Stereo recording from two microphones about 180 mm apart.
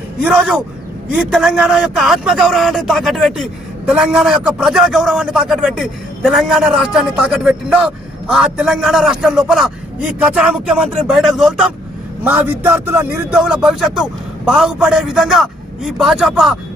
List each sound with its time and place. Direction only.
0.2 s speech: 5° right (ahead or behind)